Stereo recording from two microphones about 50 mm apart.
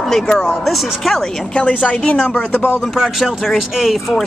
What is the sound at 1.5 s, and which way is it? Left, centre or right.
Speech, left.